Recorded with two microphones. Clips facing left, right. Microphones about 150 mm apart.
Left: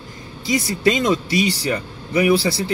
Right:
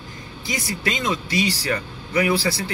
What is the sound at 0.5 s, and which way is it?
Speech, 30° left (ahead or behind).